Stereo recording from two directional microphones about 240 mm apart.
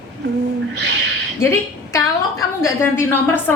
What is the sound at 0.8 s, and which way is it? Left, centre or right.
Speech, right.